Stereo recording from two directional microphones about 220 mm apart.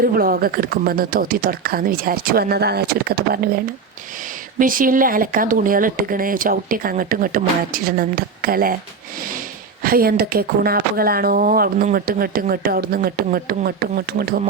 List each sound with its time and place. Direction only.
0.0 s speech: 40° right (ahead or behind)
9.8 s speech: 40° right (ahead or behind)